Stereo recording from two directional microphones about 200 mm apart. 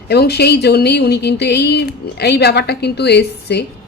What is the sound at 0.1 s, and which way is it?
Speech, 55° left (ahead or behind).